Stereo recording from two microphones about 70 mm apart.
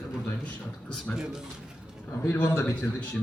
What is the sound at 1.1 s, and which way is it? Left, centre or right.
Speech, centre.